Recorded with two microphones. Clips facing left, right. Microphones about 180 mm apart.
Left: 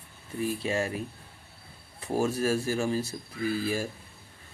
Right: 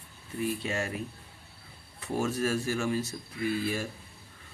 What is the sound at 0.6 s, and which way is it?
Speech, 30° left (ahead or behind).